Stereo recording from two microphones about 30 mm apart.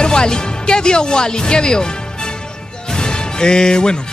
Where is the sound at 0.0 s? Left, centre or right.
Left.